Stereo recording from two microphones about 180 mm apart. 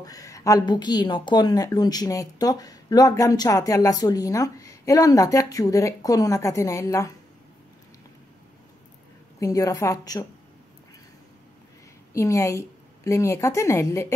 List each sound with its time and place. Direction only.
0.0 s a woman's voice: 20° left (ahead or behind)
9.4 s a woman's voice: 20° left (ahead or behind)
12.1 s a woman's voice: 15° left (ahead or behind)